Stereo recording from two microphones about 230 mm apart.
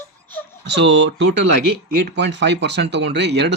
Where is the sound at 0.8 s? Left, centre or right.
Right.